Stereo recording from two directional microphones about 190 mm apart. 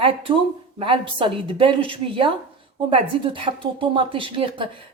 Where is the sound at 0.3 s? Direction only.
30° right (ahead or behind).